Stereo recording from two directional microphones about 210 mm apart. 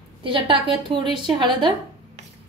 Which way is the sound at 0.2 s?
25° right (ahead or behind).